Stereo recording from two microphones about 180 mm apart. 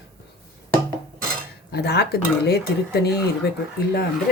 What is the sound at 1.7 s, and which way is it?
Speech, 65° left (ahead or behind).